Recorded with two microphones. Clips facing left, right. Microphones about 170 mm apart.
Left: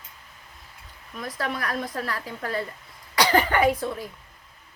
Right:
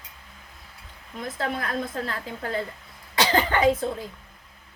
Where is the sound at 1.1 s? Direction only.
25° right (ahead or behind).